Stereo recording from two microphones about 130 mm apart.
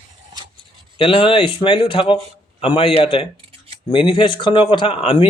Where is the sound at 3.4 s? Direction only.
50° right (ahead or behind).